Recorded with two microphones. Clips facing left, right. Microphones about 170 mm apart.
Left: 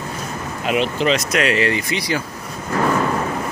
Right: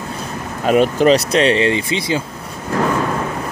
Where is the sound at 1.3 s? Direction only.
30° right (ahead or behind).